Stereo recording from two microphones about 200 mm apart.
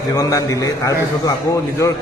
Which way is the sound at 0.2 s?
15° left (ahead or behind).